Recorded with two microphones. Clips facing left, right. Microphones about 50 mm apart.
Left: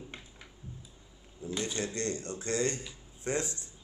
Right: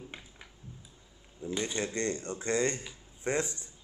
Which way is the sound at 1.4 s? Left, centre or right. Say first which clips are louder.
Right 1 dB; centre.